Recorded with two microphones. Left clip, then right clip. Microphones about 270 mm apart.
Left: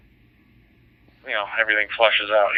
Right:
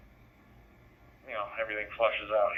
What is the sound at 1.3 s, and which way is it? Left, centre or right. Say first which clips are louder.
Speech: left 13 dB; centre.